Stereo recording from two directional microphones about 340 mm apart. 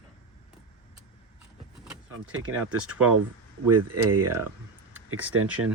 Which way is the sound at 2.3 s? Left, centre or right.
Right.